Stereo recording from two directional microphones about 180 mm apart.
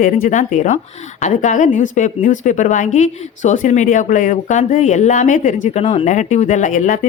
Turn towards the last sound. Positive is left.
turn(degrees=45)  # may be behind; listen again after turning